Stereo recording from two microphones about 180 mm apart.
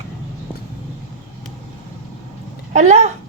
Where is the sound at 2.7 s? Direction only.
40° right (ahead or behind).